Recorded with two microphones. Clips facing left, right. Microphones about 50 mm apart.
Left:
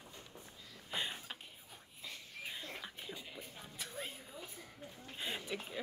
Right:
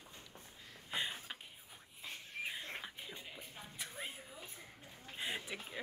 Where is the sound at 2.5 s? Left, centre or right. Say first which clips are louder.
Even; right.